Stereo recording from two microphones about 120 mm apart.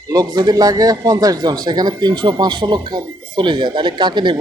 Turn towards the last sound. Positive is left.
turn(degrees=-40)  # may be behind; listen again after turning